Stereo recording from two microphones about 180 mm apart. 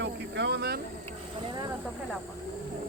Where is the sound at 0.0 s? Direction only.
70° right (ahead or behind).